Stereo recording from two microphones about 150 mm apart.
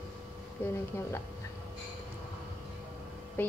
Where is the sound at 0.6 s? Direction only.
15° left (ahead or behind).